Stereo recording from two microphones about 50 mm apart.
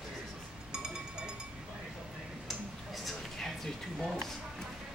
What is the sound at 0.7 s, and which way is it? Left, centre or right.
Music, centre.